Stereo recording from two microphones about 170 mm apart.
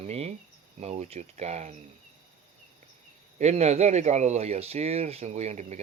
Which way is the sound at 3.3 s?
40° right (ahead or behind).